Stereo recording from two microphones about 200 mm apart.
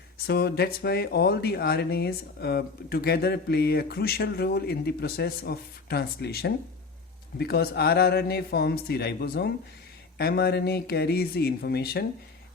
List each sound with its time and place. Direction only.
0.3 s speech: 50° left (ahead or behind)